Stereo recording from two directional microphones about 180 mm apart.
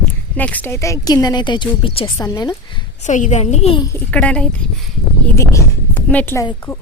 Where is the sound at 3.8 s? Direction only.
15° left (ahead or behind).